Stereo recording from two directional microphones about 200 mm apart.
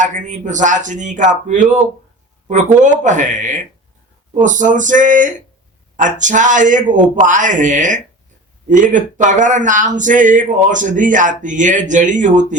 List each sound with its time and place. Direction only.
0.0 s speech: 40° right (ahead or behind)